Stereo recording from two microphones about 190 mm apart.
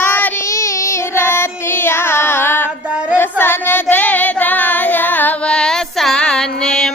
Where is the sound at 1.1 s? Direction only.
15° left (ahead or behind).